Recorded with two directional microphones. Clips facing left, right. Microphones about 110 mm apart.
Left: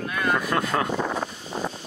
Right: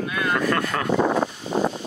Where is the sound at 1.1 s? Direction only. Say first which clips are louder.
Right 7 dB; 60° right (ahead or behind).